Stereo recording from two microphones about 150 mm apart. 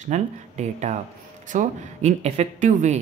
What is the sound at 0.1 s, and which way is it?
Speech, 50° right (ahead or behind).